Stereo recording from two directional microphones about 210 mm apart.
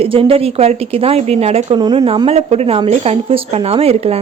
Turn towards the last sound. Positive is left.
turn(degrees=-30)  # may be behind; listen again after turning